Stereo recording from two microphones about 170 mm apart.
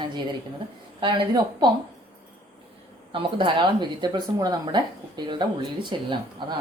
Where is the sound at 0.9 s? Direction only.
25° right (ahead or behind).